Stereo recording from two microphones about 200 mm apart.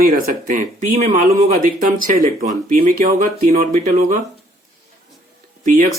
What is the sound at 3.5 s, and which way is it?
Speech, 45° right (ahead or behind).